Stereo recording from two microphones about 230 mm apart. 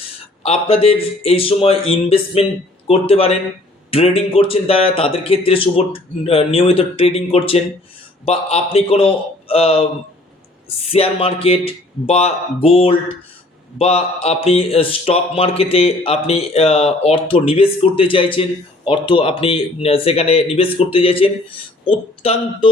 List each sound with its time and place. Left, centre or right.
0.4 s speech: left